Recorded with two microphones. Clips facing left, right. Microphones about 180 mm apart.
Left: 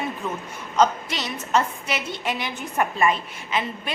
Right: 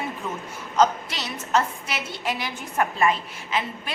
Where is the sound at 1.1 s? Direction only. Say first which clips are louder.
Left 1 dB; centre (ahead or behind).